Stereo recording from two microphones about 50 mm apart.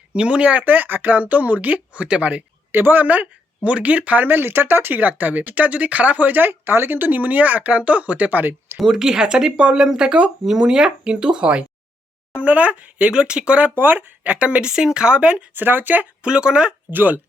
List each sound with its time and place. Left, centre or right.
0.1 s speech: right
0.6 s speech: right
2.7 s speech: right
8.8 s speech: centre
13.7 s speech: right
14.3 s speech: right
15.5 s speech: right
16.2 s speech: centre
16.9 s speech: right